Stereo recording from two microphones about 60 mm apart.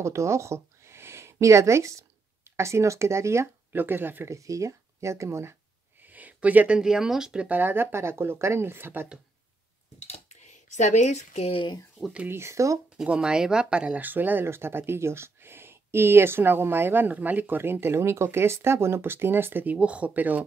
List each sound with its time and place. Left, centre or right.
0.0 s speech: right
3.7 s speech: right
4.3 s speech: right
6.0 s a sound: right
6.8 s speech: centre
7.4 s speech: right
12.3 s speech: right
12.9 s speech: centre
14.0 s speech: right